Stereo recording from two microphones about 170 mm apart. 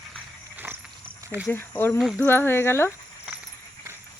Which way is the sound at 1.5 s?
10° left (ahead or behind).